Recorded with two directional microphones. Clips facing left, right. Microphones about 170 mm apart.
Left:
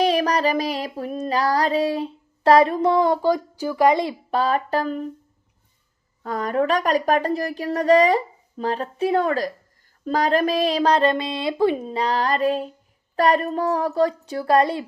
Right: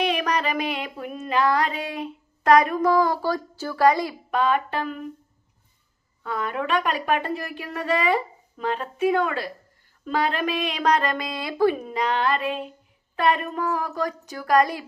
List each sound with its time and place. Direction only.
0.0 s female singing: 35° left (ahead or behind)
6.2 s a woman's voice: 40° left (ahead or behind)